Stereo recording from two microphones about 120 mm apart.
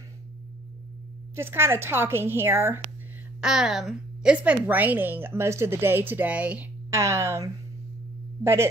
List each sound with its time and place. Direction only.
1.3 s a woman's voice: 20° right (ahead or behind)
3.3 s a woman's voice: 5° right (ahead or behind)
6.9 s a woman's voice: 25° right (ahead or behind)